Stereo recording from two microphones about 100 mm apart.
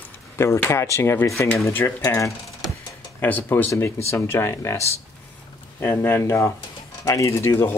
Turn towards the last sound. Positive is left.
turn(degrees=25)  # may be behind; listen again after turning